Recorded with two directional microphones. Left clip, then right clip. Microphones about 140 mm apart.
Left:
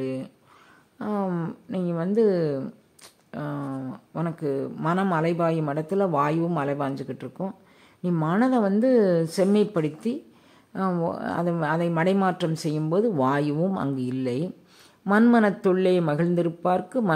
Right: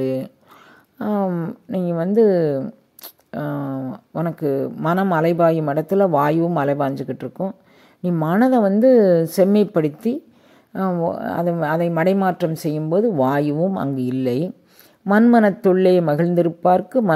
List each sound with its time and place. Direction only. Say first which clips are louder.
0.0 s speech: right 8 dB; 40° right (ahead or behind)
1.2 s speech: right 6 dB; 20° right (ahead or behind)
1.7 s speech: right 7 dB; 35° right (ahead or behind)
3.0 s a sound: right 7 dB; 40° right (ahead or behind)
3.8 s speech: right 6 dB; 30° right (ahead or behind)
10.9 s speech: right 6 dB; 20° right (ahead or behind)